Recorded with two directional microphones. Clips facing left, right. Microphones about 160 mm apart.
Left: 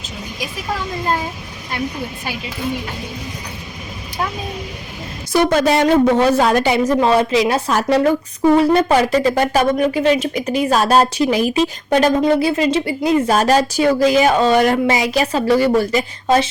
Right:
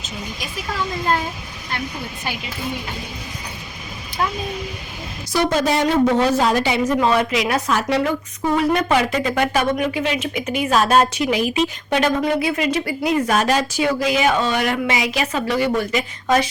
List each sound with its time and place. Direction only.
5.3 s a woman's voice: 55° left (ahead or behind)
6.8 s speech: 30° left (ahead or behind)
7.8 s speech: 40° left (ahead or behind)